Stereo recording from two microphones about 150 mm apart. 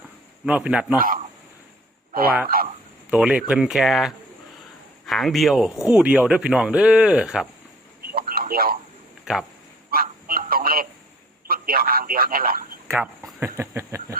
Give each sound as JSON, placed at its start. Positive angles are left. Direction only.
{"t": 0.4, "sound": "speech", "side_deg": -10}
{"t": 0.9, "sound": "a man's voice", "side_deg": -65}
{"t": 2.1, "sound": "speech", "side_deg": -85}
{"t": 3.1, "sound": "speech", "side_deg": -10}
{"t": 8.1, "sound": "a sound", "side_deg": -90}
{"t": 9.3, "sound": "speech", "side_deg": -5}
{"t": 9.9, "sound": "a sound", "side_deg": -75}
{"t": 11.4, "sound": "speech", "side_deg": -75}
{"t": 13.4, "sound": "speech", "side_deg": -15}